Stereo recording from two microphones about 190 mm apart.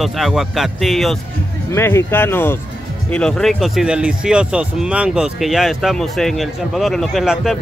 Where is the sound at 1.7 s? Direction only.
15° left (ahead or behind).